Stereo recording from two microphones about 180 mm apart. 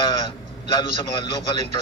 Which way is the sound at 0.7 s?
25° left (ahead or behind).